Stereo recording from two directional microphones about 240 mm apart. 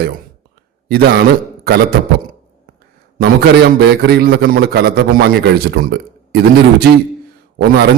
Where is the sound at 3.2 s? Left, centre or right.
Right.